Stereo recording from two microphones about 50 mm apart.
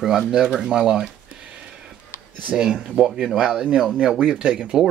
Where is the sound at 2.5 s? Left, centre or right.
Centre.